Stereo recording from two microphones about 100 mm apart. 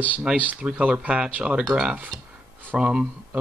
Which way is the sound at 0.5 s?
10° right (ahead or behind).